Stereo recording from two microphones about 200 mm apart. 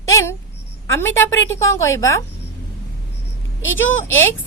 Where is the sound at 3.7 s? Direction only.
75° left (ahead or behind).